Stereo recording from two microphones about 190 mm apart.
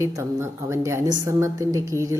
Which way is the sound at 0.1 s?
15° right (ahead or behind).